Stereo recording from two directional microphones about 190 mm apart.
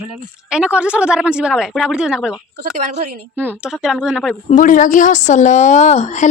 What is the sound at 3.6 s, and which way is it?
Speech, 5° right (ahead or behind).